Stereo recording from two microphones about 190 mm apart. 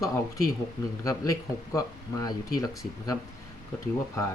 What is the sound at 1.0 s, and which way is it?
Speech, 20° left (ahead or behind).